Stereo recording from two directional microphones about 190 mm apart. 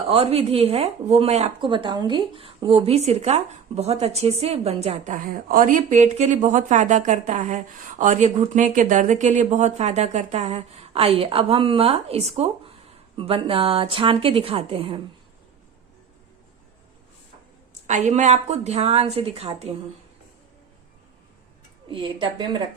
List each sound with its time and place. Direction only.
0.1 s speech: 30° right (ahead or behind)
17.8 s speech: 40° right (ahead or behind)
21.8 s speech: 25° right (ahead or behind)